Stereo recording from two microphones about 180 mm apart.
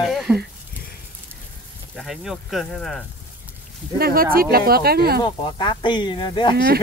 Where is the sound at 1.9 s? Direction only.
Centre (ahead or behind).